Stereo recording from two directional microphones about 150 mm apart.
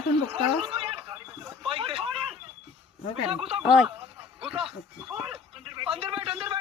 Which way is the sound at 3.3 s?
40° right (ahead or behind).